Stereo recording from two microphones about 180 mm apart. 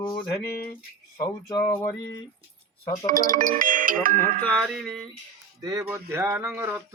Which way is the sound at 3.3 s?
45° right (ahead or behind).